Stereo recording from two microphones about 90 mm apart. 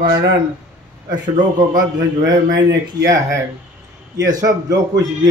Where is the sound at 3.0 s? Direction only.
40° right (ahead or behind).